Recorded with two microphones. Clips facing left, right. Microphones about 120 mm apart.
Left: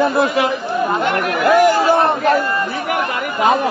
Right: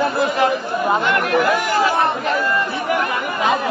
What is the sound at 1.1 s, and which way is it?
Speech, 55° left (ahead or behind).